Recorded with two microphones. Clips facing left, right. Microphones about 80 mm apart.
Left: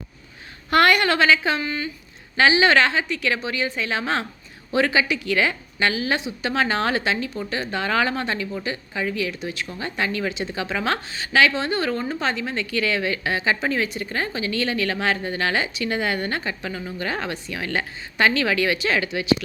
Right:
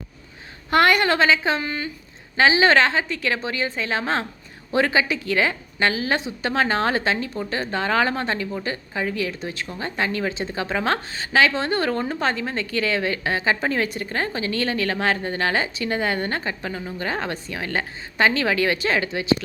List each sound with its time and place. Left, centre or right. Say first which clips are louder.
0.7 s a woman's voice: even; right